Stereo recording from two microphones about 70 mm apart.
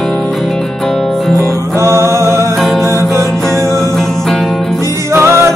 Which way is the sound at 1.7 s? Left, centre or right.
Right.